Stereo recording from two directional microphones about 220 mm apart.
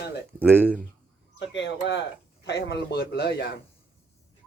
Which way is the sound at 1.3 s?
55° left (ahead or behind).